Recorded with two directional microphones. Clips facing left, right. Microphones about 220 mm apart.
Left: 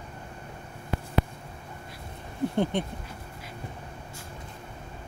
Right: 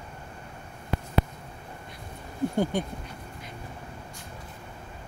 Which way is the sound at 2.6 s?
25° left (ahead or behind).